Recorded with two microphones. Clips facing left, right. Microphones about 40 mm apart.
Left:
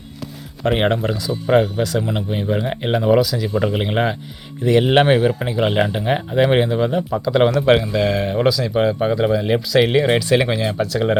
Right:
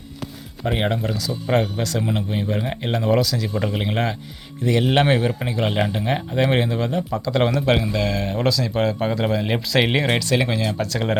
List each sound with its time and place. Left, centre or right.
0.7 s speech: left
1.5 s speech: centre
5.1 s speech: centre
9.2 s speech: centre
9.6 s speech: centre
10.2 s speech: centre